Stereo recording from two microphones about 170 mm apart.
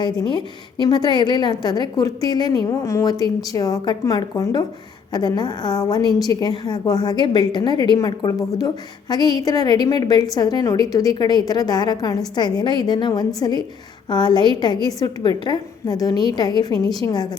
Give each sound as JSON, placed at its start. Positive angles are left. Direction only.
{"t": 0.0, "sound": "a woman's voice", "side_deg": 25}